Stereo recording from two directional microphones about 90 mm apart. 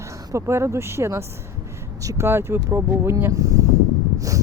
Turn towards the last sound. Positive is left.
turn(degrees=-40)  # may be behind; listen again after turning